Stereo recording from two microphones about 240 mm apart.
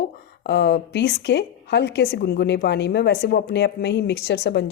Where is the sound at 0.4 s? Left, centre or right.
Left.